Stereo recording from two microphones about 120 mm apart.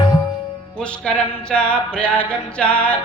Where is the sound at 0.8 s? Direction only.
10° left (ahead or behind).